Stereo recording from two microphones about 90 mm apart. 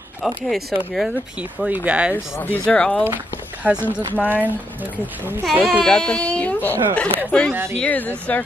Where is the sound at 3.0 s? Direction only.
20° right (ahead or behind).